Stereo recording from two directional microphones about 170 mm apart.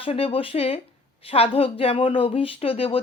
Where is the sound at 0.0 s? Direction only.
35° left (ahead or behind).